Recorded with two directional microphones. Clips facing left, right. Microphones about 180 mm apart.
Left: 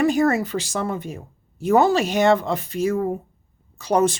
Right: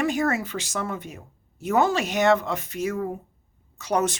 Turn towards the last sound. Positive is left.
turn(degrees=30)  # may be behind; listen again after turning